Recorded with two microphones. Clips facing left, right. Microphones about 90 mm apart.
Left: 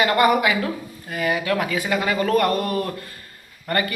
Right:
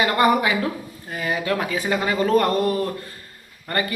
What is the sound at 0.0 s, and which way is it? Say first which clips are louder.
A man's voice: left 1 dB; 25° right (ahead or behind).